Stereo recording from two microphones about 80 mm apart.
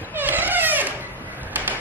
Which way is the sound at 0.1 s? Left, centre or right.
Right.